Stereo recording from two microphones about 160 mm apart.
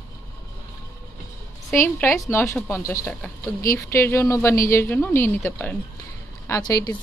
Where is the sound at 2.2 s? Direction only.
20° left (ahead or behind).